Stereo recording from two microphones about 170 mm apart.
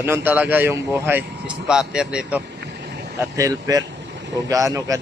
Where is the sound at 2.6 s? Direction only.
75° right (ahead or behind).